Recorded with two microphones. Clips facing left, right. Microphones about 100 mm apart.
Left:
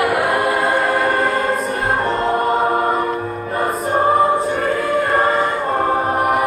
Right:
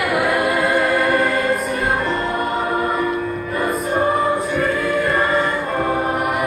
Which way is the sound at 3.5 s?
35° left (ahead or behind).